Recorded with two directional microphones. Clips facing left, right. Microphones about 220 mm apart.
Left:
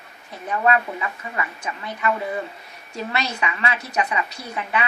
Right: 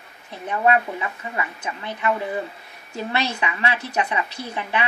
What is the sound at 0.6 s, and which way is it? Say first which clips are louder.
A woman's voice: right 1 dB; 20° right (ahead or behind).